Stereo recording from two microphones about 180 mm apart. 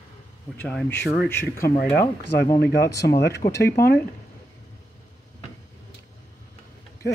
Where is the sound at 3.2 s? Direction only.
65° left (ahead or behind).